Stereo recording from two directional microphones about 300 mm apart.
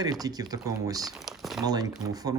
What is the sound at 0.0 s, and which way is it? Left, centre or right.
Speech, centre.